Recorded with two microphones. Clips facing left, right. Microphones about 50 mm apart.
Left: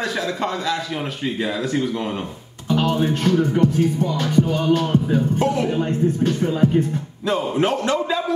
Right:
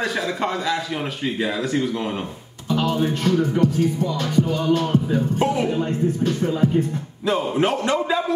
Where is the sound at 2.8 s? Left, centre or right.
Left.